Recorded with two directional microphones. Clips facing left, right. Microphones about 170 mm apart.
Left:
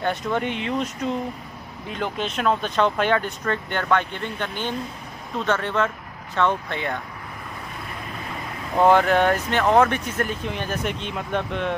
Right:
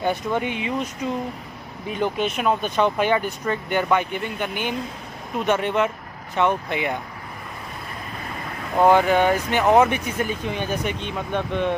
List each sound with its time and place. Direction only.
0.0 s speech: 5° right (ahead or behind)
1.9 s speech: 10° right (ahead or behind)
8.7 s speech: 5° right (ahead or behind)
10.0 s speech: centre (ahead or behind)